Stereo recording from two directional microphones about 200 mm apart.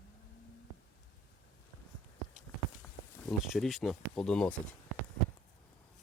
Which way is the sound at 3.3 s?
Centre (ahead or behind).